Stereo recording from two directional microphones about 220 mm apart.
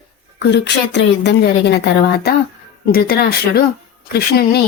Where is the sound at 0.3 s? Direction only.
50° left (ahead or behind).